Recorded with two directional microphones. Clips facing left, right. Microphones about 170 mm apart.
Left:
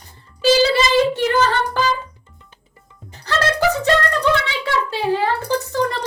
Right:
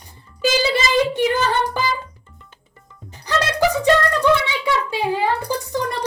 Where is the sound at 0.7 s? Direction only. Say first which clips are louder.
Left 2 dB; 15° right (ahead or behind).